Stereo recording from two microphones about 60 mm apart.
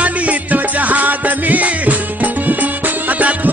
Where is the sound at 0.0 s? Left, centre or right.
Right.